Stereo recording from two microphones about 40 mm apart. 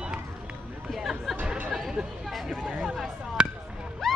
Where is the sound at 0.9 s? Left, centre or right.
Centre.